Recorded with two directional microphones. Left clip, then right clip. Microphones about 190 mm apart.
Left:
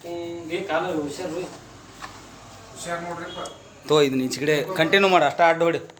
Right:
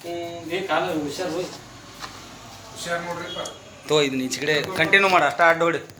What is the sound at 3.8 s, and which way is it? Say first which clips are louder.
Speech: left 2 dB; 40° left (ahead or behind).